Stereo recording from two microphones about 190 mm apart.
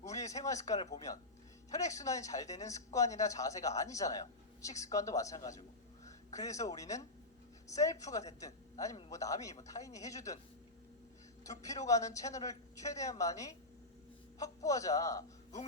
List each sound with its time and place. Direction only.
0.1 s speech: 15° left (ahead or behind)
11.6 s speech: 15° left (ahead or behind)